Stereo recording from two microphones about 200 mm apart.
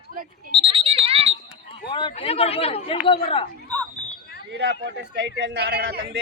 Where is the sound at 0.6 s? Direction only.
25° right (ahead or behind).